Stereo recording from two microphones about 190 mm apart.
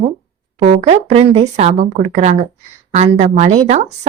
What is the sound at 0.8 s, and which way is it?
Speech, 35° right (ahead or behind).